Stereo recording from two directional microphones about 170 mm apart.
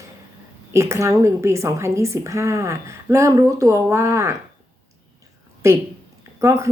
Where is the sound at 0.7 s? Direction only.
15° right (ahead or behind).